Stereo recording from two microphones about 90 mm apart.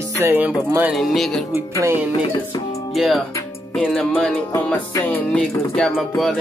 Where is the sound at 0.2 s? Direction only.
25° right (ahead or behind).